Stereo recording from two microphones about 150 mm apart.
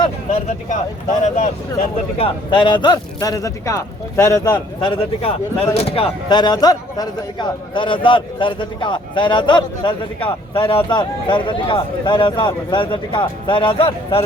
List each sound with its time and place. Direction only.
0.0 s speech: 45° left (ahead or behind)
2.1 s a man's voice: 35° left (ahead or behind)